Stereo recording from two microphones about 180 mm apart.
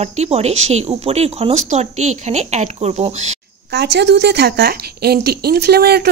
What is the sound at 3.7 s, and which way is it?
Speech, 70° right (ahead or behind).